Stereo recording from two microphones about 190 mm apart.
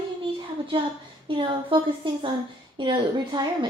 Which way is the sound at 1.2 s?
25° right (ahead or behind).